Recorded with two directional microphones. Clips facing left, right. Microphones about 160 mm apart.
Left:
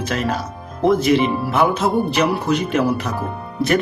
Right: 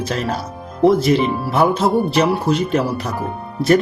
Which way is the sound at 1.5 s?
35° right (ahead or behind).